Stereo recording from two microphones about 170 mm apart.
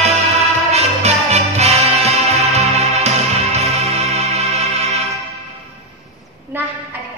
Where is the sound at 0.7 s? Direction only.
40° right (ahead or behind).